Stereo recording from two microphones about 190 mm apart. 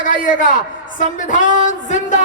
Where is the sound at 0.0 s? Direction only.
45° left (ahead or behind).